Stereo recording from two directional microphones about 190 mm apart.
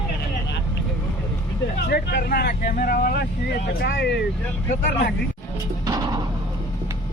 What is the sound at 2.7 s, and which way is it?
Speech, 50° left (ahead or behind).